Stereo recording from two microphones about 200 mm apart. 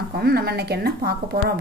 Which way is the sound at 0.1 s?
50° right (ahead or behind).